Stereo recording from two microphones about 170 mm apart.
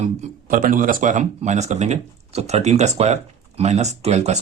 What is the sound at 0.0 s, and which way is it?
Speech, 50° right (ahead or behind).